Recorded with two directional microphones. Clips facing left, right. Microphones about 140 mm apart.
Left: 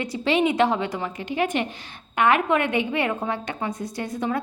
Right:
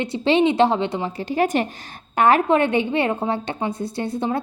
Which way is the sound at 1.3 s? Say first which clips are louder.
Right 4 dB; 40° right (ahead or behind).